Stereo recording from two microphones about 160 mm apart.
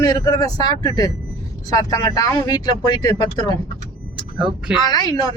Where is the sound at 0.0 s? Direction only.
25° left (ahead or behind).